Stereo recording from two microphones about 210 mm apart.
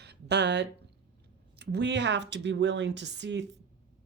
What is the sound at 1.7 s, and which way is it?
Speech, 55° right (ahead or behind).